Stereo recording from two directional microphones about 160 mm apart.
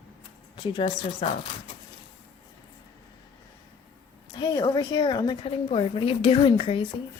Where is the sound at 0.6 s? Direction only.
30° left (ahead or behind).